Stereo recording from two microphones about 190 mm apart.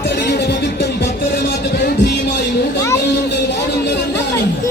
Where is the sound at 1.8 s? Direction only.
60° left (ahead or behind).